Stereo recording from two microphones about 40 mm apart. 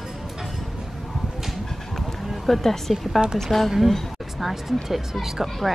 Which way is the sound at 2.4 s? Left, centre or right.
Centre.